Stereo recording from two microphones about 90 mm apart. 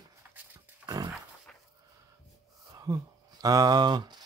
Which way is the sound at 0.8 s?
50° right (ahead or behind).